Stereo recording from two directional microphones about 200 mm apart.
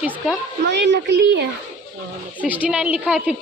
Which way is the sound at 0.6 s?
60° right (ahead or behind).